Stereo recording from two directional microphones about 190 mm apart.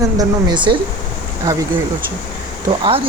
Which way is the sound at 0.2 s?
25° right (ahead or behind).